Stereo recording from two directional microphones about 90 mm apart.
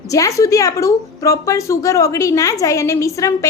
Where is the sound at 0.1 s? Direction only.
35° left (ahead or behind).